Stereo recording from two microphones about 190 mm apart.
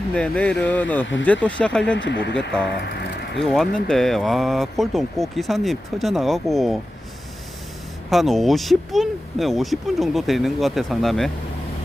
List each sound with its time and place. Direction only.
0.1 s speech: 5° left (ahead or behind)
2.0 s speech: 70° left (ahead or behind)
2.5 s speech: 5° left (ahead or behind)
8.1 s speech: centre (ahead or behind)